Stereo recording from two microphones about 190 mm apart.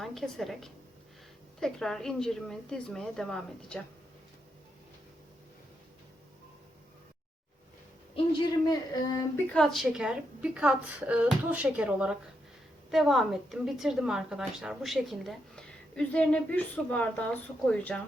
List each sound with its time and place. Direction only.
0.0 s a woman's voice: centre (ahead or behind)
8.1 s speech: 25° left (ahead or behind)
9.5 s a woman's voice: 5° left (ahead or behind)